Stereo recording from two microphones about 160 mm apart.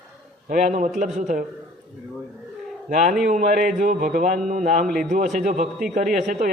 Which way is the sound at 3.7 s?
60° right (ahead or behind).